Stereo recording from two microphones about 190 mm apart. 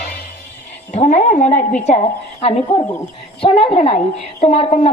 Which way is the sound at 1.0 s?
40° left (ahead or behind).